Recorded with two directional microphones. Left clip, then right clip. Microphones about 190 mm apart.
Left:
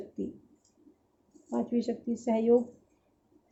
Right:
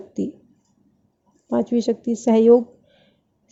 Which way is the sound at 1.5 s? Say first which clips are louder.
Right 11 dB; 55° right (ahead or behind).